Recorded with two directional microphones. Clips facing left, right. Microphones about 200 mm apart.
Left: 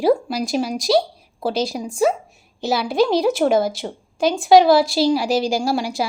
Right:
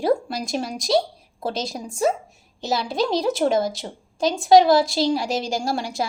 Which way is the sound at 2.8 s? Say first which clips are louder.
Left 6 dB; 60° left (ahead or behind).